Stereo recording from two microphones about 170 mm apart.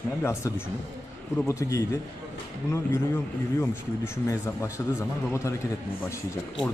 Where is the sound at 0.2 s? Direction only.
15° left (ahead or behind).